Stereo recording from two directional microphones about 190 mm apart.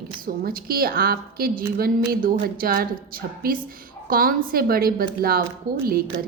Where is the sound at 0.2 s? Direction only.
50° right (ahead or behind).